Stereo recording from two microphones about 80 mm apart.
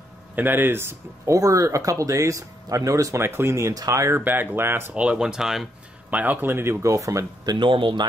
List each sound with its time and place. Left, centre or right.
0.4 s speech: right
4.2 s speech: right
4.9 s speech: centre
6.0 s speech: centre; by 7.2 s right
7.4 s speech: right